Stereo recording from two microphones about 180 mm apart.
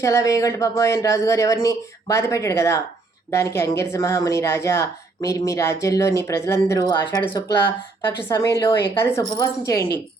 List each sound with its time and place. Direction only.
0.0 s a woman's voice: 15° left (ahead or behind)